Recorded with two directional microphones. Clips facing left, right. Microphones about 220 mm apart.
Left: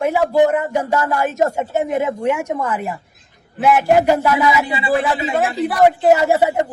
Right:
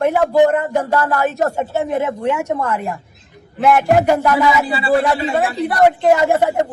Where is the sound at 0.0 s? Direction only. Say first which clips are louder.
Right 2 dB; 10° left (ahead or behind).